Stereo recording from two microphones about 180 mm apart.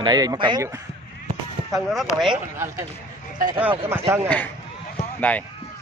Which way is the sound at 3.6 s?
10° right (ahead or behind).